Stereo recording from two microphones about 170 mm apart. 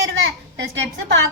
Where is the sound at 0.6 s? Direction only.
90° right.